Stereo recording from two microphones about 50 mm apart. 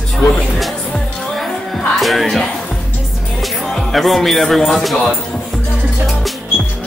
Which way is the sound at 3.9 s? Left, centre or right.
Centre.